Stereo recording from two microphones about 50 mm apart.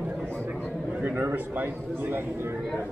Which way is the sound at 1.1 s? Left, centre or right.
Right.